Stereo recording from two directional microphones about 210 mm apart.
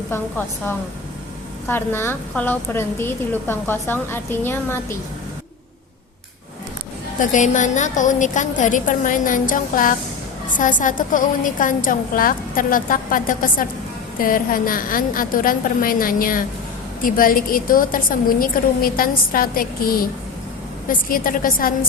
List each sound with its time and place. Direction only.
0.1 s a woman's voice: 10° left (ahead or behind)
7.2 s a woman's voice: 35° left (ahead or behind)